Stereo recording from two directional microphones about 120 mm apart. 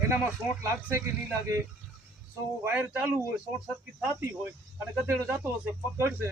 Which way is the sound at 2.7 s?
15° right (ahead or behind).